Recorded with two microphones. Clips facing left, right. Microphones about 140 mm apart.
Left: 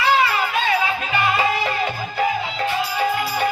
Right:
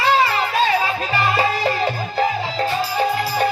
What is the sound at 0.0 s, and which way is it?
Music, 35° right (ahead or behind).